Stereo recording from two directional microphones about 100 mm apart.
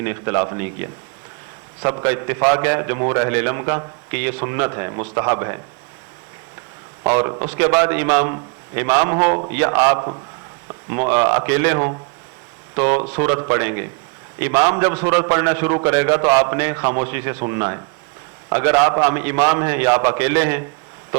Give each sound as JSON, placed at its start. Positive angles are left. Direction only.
{"t": 0.0, "sound": "a man's voice", "side_deg": -30}
{"t": 7.0, "sound": "a man's voice", "side_deg": -25}
{"t": 9.1, "sound": "a man's voice", "side_deg": -40}
{"t": 9.5, "sound": "a man's voice", "side_deg": -25}